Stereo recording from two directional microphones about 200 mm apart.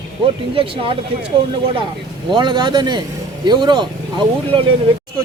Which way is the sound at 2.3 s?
20° right (ahead or behind).